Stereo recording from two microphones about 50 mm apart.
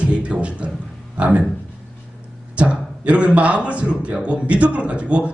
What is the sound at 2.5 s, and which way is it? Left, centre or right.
Speech, right.